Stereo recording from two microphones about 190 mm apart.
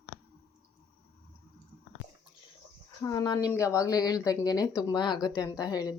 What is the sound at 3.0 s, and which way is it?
Speech, 20° left (ahead or behind).